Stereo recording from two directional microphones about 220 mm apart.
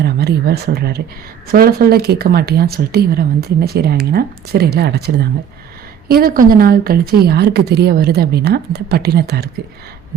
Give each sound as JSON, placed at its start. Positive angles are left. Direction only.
{"t": 0.0, "sound": "speech", "side_deg": -45}